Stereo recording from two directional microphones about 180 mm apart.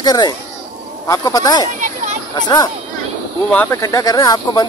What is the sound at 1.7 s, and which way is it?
Speech, 45° right (ahead or behind).